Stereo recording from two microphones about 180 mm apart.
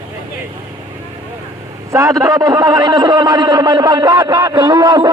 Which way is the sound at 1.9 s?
20° right (ahead or behind).